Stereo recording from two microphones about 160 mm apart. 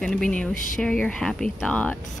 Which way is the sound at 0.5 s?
55° left (ahead or behind).